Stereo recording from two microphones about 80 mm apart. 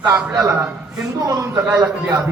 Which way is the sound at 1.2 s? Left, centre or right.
Right.